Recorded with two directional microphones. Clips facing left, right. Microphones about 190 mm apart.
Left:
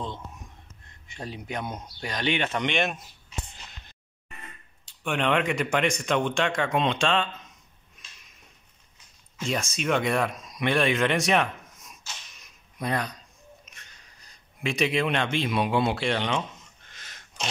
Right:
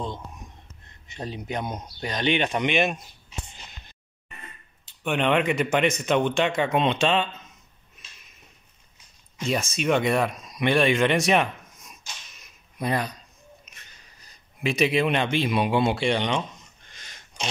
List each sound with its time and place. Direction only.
1.0 s speech: 20° right (ahead or behind)
2.7 s speech: centre (ahead or behind)
3.5 s a sound: centre (ahead or behind)
4.8 s speech: centre (ahead or behind)
9.5 s speech: centre (ahead or behind)
16.9 s a sound: centre (ahead or behind)